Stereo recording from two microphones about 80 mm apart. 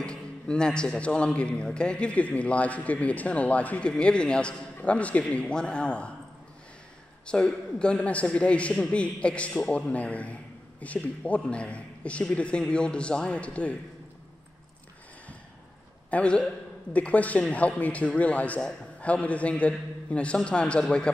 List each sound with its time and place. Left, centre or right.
0.0 s a man's voice: centre
7.2 s a man's voice: centre
16.1 s a man's voice: centre